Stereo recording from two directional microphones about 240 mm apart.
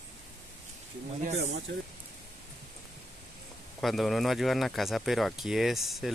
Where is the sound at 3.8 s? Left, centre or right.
Centre.